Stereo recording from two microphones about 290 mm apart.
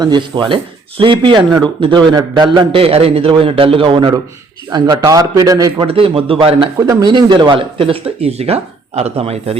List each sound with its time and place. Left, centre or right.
0.0 s a man's voice: centre